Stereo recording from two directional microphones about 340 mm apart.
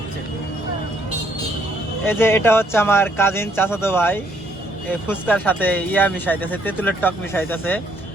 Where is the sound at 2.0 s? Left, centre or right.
Centre.